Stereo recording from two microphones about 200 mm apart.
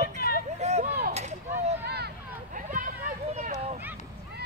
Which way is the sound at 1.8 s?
55° right (ahead or behind).